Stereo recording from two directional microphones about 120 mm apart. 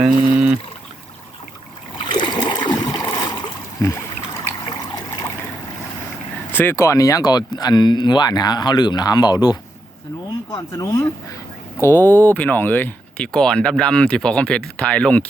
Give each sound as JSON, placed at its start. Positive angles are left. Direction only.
{"t": 0.0, "sound": "a sound", "side_deg": -10}
{"t": 2.1, "sound": "splash", "side_deg": 35}
{"t": 4.7, "sound": "trickle", "side_deg": 30}
{"t": 6.5, "sound": "speech", "side_deg": 20}
{"t": 10.7, "sound": "speech", "side_deg": 25}